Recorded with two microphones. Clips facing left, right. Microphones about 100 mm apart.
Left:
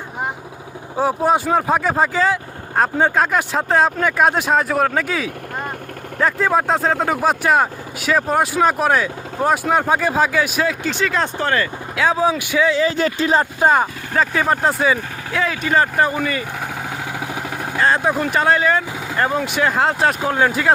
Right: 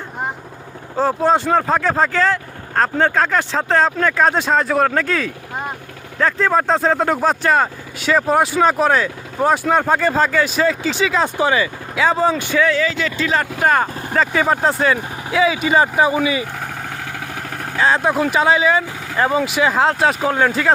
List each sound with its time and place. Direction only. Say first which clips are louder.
0.9 s speech: right 1 dB; 10° left (ahead or behind)
12.8 s speech: left 2 dB; 35° left (ahead or behind)
13.4 s speech: right 1 dB; 20° left (ahead or behind)
14.1 s speech: right 2 dB; centre (ahead or behind)
17.7 s speech: right 1 dB; centre (ahead or behind)